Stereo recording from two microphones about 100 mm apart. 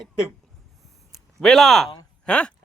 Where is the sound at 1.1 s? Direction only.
5° left (ahead or behind).